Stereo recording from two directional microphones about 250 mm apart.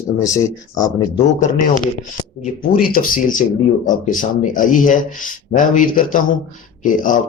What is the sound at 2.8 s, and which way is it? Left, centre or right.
Speech, left.